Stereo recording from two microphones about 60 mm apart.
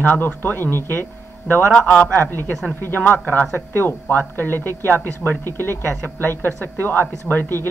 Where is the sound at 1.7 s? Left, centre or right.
Centre.